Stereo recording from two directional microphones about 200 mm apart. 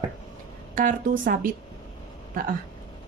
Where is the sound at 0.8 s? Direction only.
40° right (ahead or behind).